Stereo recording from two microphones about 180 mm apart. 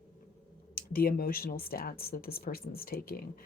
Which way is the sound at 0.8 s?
55° left (ahead or behind).